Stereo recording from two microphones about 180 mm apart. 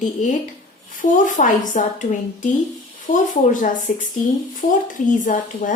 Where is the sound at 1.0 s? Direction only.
45° left (ahead or behind).